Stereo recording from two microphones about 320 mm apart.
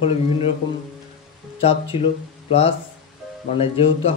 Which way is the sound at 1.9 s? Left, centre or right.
Centre.